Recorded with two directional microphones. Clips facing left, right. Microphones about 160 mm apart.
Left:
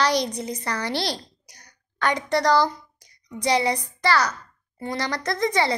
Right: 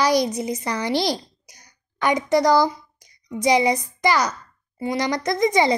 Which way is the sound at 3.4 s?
10° right (ahead or behind).